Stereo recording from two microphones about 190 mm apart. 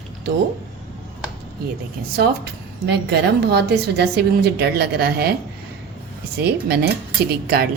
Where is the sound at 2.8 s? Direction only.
60° right (ahead or behind).